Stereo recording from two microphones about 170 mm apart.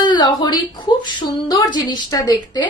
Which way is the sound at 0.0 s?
25° left (ahead or behind).